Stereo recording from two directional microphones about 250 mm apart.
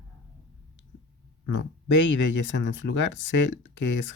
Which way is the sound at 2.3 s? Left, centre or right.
Left.